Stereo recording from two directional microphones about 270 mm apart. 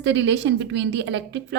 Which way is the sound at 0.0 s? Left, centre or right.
Right.